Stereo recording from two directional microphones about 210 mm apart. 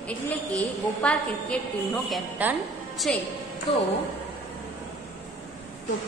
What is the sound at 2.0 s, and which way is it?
Speech, 5° right (ahead or behind).